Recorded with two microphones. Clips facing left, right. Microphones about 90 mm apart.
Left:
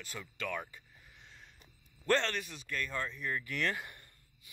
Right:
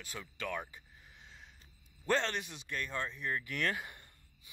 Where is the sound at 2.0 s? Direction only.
5° right (ahead or behind).